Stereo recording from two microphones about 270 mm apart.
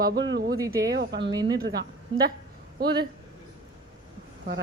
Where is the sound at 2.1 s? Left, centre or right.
Centre.